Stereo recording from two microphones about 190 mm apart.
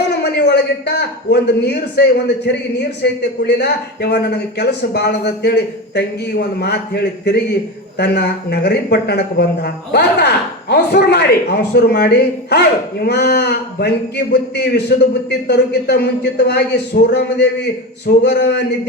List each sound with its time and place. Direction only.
0.1 s speech: 65° left (ahead or behind)